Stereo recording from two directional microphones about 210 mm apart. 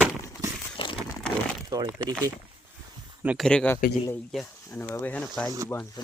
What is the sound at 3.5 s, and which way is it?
Speech, 5° left (ahead or behind).